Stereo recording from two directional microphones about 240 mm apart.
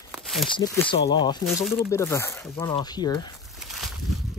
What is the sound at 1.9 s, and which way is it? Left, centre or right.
Speech, centre.